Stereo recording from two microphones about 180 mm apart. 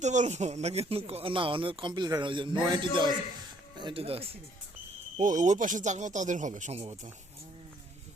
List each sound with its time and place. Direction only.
0.0 s speech: 40° right (ahead or behind)
5.1 s speech: 45° right (ahead or behind)